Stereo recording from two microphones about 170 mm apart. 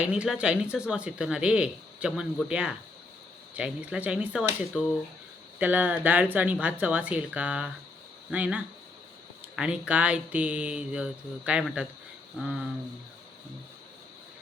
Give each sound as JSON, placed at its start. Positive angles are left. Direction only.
{"t": 0.0, "sound": "speech", "side_deg": -5}
{"t": 5.5, "sound": "speech", "side_deg": -10}